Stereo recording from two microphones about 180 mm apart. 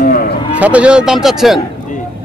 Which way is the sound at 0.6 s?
5° right (ahead or behind).